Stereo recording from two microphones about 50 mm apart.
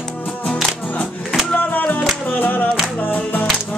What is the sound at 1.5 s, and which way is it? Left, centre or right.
Music, left.